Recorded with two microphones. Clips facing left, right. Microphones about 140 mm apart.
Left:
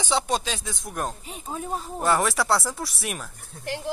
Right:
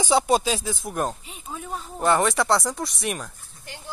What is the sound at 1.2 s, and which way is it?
Speech, 40° left (ahead or behind).